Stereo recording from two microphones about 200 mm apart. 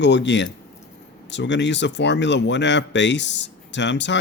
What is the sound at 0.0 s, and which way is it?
Speech, 60° left (ahead or behind).